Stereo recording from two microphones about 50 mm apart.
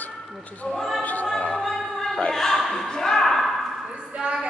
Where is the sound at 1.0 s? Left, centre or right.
Left.